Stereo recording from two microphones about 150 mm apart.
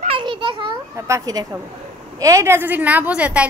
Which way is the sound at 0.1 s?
35° right (ahead or behind).